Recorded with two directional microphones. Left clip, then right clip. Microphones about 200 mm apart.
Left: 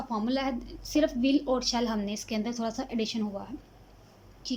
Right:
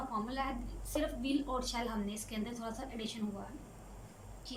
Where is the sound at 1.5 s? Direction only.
45° left (ahead or behind).